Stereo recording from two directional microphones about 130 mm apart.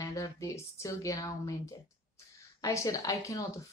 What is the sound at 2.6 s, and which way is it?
Speech, 25° left (ahead or behind).